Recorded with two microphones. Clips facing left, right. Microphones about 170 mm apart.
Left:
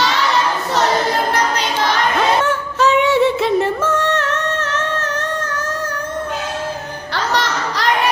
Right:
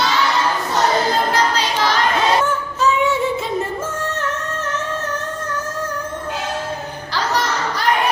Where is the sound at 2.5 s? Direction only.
75° left (ahead or behind).